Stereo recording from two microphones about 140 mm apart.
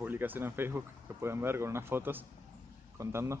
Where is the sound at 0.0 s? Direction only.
15° right (ahead or behind).